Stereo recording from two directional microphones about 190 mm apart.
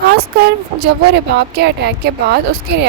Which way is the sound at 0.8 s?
60° right (ahead or behind).